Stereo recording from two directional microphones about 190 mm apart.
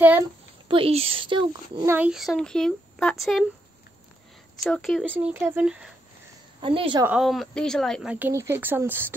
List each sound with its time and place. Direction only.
0.7 s a woman's voice: 30° right (ahead or behind)
2.0 s a child's voice: 5° right (ahead or behind)
4.6 s a child's voice: centre (ahead or behind)
5.1 s speech: 10° right (ahead or behind)
6.6 s a woman's voice: 25° right (ahead or behind)
7.1 s speech: centre (ahead or behind)